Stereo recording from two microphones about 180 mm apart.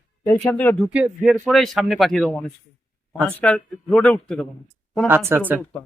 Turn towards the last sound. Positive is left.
turn(degrees=10)  # may be behind; listen again after turning